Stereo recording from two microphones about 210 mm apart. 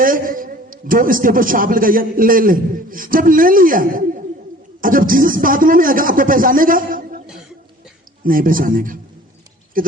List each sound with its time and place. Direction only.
0.0 s a man's voice: 40° right (ahead or behind)
8.2 s a man's voice: 40° right (ahead or behind)